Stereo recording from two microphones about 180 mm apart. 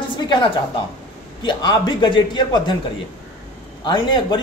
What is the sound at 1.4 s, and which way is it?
Speech, 25° left (ahead or behind).